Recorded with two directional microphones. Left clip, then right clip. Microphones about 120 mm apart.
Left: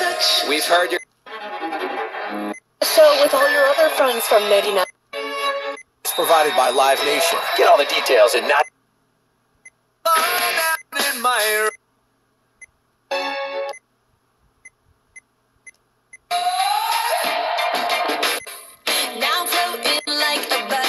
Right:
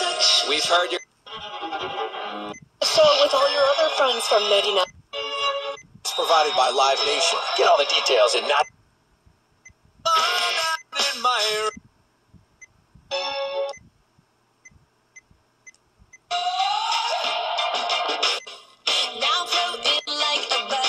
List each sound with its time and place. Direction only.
0.0 s music: 40° left (ahead or behind)
10.0 s music: 45° left (ahead or behind)
13.1 s music: 45° left (ahead or behind)
15.2 s a sound: 45° left (ahead or behind)
16.3 s music: 45° left (ahead or behind)